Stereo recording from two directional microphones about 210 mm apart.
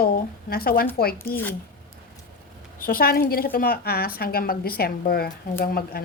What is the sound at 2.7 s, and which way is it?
A woman's voice, 45° left (ahead or behind).